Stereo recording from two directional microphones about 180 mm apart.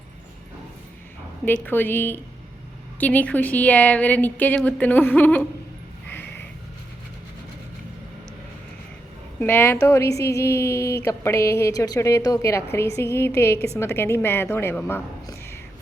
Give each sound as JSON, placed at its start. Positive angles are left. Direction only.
{"t": 1.5, "sound": "speech", "side_deg": 10}
{"t": 9.4, "sound": "speech", "side_deg": 10}